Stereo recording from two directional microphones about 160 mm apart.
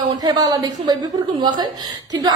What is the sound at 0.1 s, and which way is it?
A woman's voice, 25° right (ahead or behind).